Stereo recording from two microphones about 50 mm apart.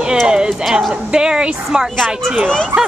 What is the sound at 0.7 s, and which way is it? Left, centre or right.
Speech, centre.